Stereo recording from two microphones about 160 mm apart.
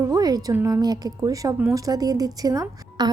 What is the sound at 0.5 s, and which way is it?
A woman's voice, 20° right (ahead or behind).